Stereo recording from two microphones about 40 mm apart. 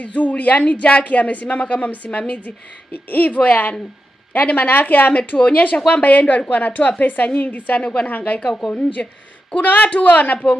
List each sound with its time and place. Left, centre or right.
0.0 s a woman's voice: left
2.9 s speech: left
3.3 s a woman's voice: left
5.8 s a woman's voice: left
7.8 s a woman's voice: left
8.1 s a woman's voice: left
8.5 s a woman's voice: left
9.6 s a woman's voice: left